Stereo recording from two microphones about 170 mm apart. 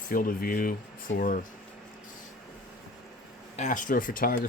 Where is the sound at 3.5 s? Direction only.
45° left (ahead or behind).